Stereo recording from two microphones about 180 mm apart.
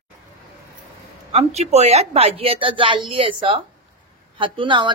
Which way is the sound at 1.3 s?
35° right (ahead or behind).